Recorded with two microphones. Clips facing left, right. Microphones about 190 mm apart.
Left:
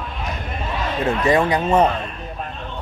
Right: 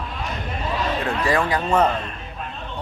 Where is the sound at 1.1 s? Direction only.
20° left (ahead or behind).